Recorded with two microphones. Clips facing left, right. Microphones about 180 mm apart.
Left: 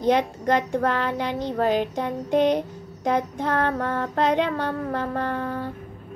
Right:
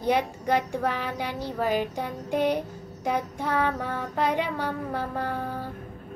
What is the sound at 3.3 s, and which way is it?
Speech, 10° right (ahead or behind).